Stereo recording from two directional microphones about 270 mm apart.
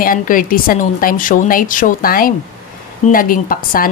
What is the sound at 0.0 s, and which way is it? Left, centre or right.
A woman's voice, left.